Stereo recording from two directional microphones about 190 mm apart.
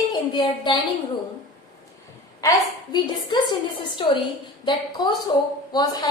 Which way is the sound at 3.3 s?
25° left (ahead or behind).